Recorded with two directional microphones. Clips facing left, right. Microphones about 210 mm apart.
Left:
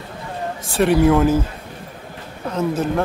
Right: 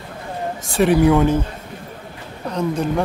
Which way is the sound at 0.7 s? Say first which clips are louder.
Even; centre (ahead or behind).